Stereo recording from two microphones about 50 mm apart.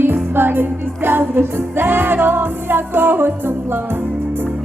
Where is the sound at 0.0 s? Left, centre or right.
Right.